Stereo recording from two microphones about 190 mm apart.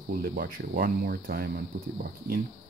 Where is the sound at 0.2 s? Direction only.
50° right (ahead or behind).